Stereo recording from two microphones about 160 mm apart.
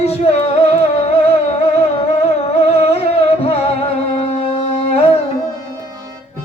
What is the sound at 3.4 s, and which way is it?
Music, 40° left (ahead or behind).